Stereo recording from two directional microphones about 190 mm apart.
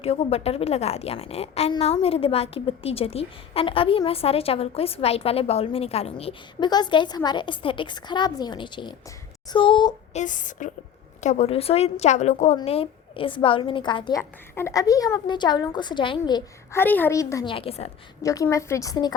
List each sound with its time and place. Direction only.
0.0 s a woman's voice: 30° left (ahead or behind)
10.1 s a woman's voice: 40° left (ahead or behind); by 16.8 s 20° left (ahead or behind)
16.8 s a woman's voice: 10° left (ahead or behind)
17.5 s a woman's voice: 30° left (ahead or behind)
18.2 s a woman's voice: 15° left (ahead or behind)